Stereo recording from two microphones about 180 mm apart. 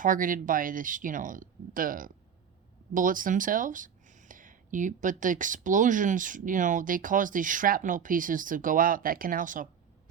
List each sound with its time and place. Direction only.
0.0 s speech: 50° right (ahead or behind)